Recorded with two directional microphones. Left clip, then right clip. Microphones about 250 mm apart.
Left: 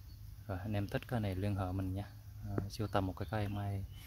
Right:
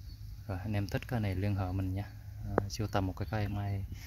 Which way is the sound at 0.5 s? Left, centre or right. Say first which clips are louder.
Right 2 dB; centre.